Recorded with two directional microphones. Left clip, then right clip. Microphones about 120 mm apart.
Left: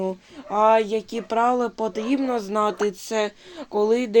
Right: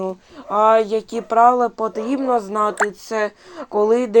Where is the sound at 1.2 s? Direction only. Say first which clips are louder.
Right 8 dB; 30° left (ahead or behind).